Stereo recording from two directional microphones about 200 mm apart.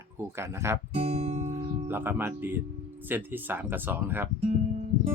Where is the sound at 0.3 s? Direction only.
15° right (ahead or behind).